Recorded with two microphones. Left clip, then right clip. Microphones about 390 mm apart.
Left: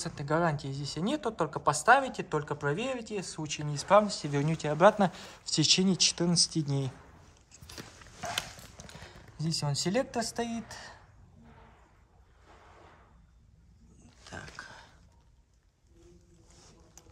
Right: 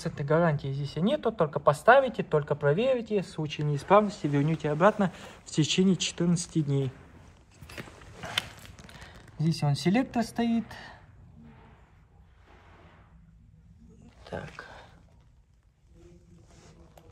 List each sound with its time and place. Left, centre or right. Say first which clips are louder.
0.0 s speech: right 4 dB; centre
6.3 s speech: left 4 dB; centre
6.6 s speech: right 4 dB; centre
9.4 s speech: right 2 dB; centre
14.2 s dog: right 5 dB; centre